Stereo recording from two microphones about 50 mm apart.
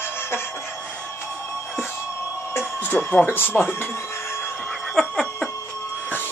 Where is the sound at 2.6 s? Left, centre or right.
Left.